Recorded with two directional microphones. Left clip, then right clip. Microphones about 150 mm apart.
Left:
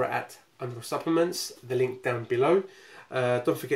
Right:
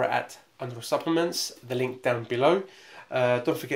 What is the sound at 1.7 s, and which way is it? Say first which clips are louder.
Speech: right 1 dB; 20° right (ahead or behind).